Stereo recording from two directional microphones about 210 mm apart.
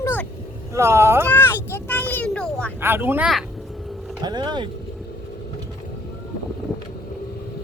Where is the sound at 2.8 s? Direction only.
10° right (ahead or behind).